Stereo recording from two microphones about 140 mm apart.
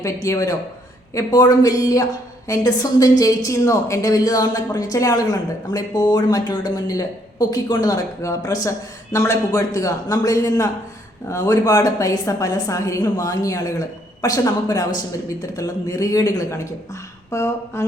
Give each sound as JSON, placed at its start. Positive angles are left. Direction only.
{"t": 0.0, "sound": "a woman's voice", "side_deg": 20}